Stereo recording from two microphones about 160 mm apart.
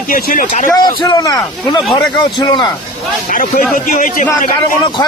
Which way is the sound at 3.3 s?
60° left (ahead or behind).